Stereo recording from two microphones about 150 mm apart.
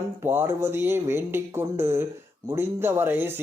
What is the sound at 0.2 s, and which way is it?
Speech, 15° right (ahead or behind).